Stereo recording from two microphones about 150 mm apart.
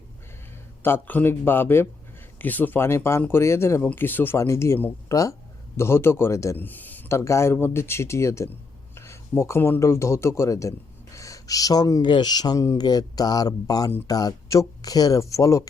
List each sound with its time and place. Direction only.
0.8 s a man's voice: 15° left (ahead or behind)